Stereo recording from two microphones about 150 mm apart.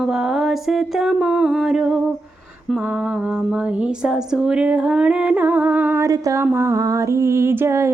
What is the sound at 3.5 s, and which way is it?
Music, 5° right (ahead or behind).